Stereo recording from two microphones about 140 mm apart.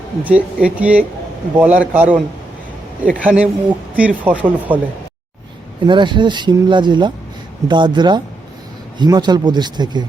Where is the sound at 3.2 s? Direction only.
5° right (ahead or behind).